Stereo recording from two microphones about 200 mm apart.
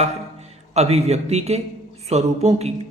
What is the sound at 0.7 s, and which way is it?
A woman's voice, 30° right (ahead or behind).